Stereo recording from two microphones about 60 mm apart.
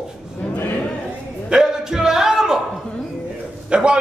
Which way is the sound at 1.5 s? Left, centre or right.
Centre.